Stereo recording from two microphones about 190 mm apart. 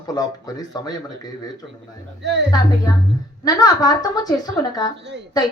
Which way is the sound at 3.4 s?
20° left (ahead or behind).